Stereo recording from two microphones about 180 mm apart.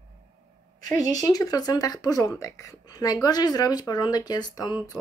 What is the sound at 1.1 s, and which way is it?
Speech, 20° left (ahead or behind).